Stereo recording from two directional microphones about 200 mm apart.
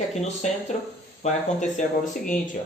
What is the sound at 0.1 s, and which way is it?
Speech, 35° left (ahead or behind).